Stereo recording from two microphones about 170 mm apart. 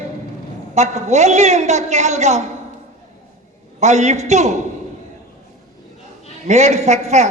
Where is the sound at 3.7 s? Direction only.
45° right (ahead or behind).